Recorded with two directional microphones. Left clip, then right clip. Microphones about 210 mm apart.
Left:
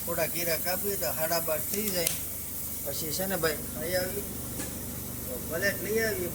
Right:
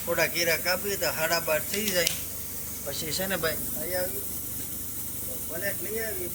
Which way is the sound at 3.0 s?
20° left (ahead or behind).